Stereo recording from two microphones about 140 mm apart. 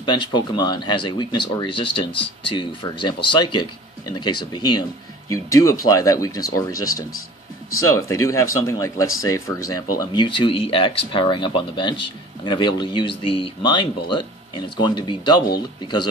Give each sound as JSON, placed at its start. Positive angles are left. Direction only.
{"t": 0.0, "sound": "speech", "side_deg": 30}